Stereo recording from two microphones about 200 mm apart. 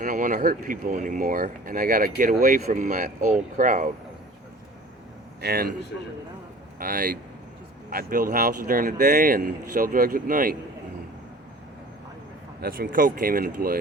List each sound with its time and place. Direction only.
0.0 s speech: 40° right (ahead or behind)
5.4 s a man's voice: 50° right (ahead or behind)
6.7 s speech: 45° right (ahead or behind)
12.6 s speech: 45° right (ahead or behind)